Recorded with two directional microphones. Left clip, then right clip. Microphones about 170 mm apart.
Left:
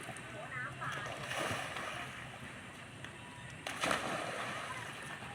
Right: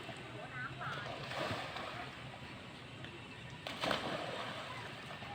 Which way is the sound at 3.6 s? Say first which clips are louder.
Left 2 dB; 5° right (ahead or behind).